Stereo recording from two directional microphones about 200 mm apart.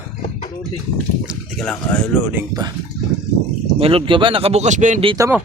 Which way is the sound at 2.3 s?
20° right (ahead or behind).